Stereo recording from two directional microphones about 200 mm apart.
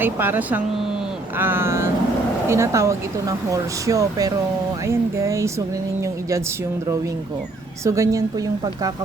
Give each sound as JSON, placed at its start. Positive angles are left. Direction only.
{"t": 0.0, "sound": "speech", "side_deg": -10}
{"t": 7.9, "sound": "speech", "side_deg": -15}